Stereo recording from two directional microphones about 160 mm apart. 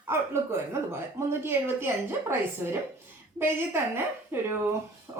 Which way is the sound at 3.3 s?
15° right (ahead or behind).